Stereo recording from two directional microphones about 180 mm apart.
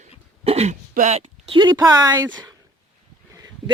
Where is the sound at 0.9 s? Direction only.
40° right (ahead or behind); by 2.5 s 20° right (ahead or behind).